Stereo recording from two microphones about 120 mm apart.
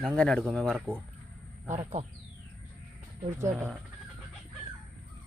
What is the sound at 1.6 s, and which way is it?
Speech, 75° right (ahead or behind).